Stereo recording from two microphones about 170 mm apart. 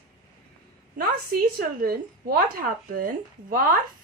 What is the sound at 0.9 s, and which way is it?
A woman's voice, 65° right (ahead or behind).